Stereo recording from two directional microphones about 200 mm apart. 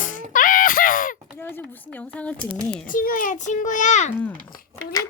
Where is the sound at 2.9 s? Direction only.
45° left (ahead or behind).